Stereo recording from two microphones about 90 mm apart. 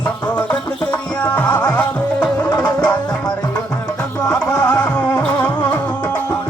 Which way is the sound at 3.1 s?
45° left (ahead or behind).